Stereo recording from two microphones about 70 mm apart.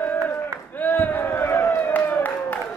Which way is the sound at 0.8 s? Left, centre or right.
Left.